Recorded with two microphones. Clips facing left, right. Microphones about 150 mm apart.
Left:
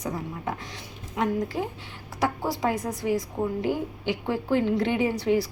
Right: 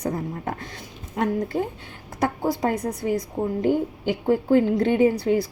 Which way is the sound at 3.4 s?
20° right (ahead or behind).